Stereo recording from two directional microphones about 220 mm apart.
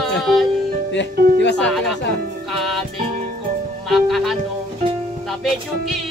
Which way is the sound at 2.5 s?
Centre (ahead or behind).